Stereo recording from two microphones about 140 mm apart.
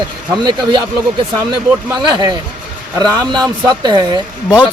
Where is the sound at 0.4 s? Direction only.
30° right (ahead or behind).